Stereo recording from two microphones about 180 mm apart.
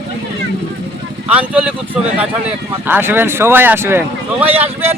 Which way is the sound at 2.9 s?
10° right (ahead or behind).